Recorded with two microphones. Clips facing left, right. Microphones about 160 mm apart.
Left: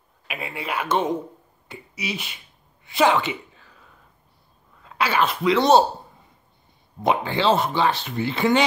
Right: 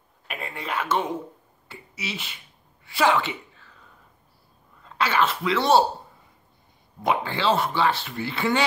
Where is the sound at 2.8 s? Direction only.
20° left (ahead or behind).